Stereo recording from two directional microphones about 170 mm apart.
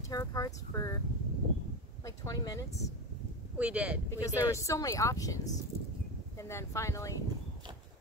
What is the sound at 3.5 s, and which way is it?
Speech, 5° right (ahead or behind).